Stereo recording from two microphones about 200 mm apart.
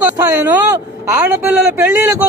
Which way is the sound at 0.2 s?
15° right (ahead or behind).